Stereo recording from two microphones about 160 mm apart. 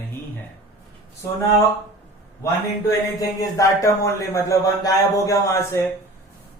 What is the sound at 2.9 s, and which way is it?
Speech, 20° left (ahead or behind).